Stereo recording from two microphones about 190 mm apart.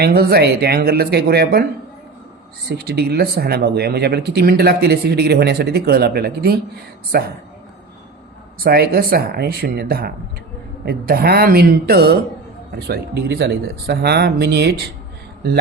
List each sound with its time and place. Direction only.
0.0 s speech: 55° right (ahead or behind)
2.6 s speech: 55° right (ahead or behind)
8.5 s speech: 50° right (ahead or behind)